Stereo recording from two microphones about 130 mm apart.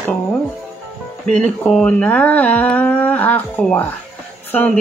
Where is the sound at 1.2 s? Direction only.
5° left (ahead or behind).